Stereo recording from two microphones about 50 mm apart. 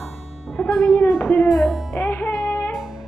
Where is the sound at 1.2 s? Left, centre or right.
Left.